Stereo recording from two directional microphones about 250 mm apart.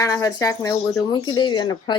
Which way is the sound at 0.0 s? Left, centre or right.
Centre.